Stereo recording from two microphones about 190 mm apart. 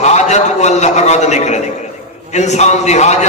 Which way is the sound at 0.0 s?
35° left (ahead or behind).